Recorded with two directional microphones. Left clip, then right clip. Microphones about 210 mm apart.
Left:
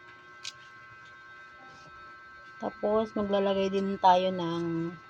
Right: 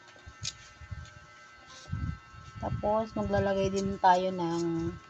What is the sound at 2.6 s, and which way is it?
A woman's voice, 30° left (ahead or behind).